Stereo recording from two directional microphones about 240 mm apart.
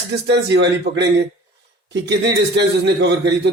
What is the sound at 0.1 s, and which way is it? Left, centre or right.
A man's voice, right.